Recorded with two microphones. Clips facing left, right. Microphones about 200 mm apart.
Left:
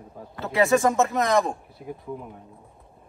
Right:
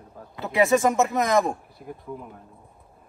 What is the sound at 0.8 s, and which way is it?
Speech, 15° right (ahead or behind).